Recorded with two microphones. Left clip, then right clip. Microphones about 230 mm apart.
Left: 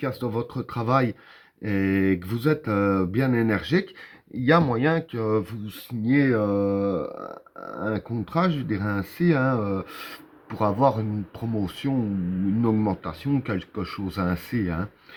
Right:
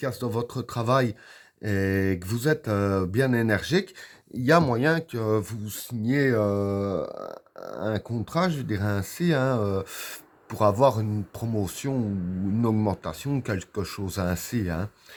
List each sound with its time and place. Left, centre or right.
0.0 s speech: right